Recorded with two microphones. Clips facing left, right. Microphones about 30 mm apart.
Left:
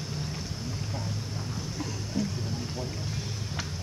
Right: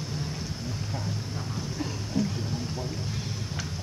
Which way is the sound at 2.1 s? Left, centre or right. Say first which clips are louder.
Right 3 dB; centre.